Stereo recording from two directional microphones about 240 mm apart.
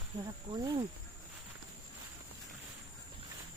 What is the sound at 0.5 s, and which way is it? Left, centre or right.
Cricket, centre.